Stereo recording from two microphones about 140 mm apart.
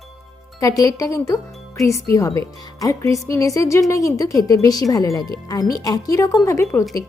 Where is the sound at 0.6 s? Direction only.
25° left (ahead or behind).